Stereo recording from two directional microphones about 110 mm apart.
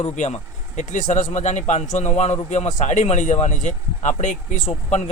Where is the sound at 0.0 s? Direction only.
90° left.